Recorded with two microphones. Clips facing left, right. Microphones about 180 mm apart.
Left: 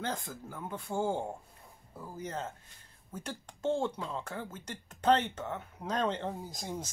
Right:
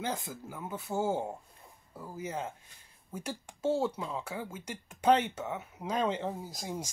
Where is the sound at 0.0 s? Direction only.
10° right (ahead or behind).